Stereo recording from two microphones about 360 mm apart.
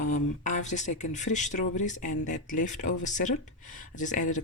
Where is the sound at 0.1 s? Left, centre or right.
Centre.